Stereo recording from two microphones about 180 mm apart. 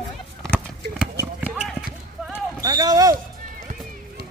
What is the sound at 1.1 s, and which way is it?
Clip-clop, 10° right (ahead or behind).